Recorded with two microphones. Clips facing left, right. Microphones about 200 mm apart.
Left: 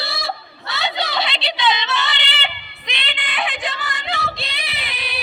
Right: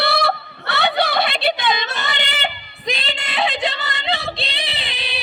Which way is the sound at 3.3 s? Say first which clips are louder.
Right 5 dB; 25° right (ahead or behind).